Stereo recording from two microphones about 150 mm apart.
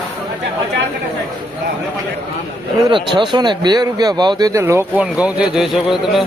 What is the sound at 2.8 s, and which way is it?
Speech, 30° right (ahead or behind).